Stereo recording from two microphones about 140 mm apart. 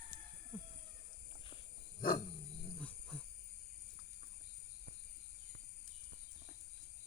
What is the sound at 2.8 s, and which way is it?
Wild animals, 5° left (ahead or behind).